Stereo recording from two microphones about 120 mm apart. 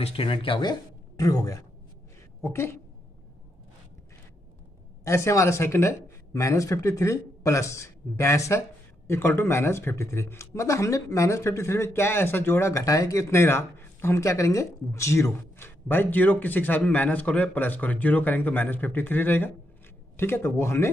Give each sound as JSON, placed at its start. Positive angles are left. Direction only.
{"t": 0.0, "sound": "speech", "side_deg": 50}
{"t": 5.0, "sound": "speech", "side_deg": 25}